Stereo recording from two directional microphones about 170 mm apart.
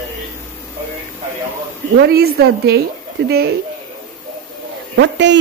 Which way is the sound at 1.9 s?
70° right (ahead or behind).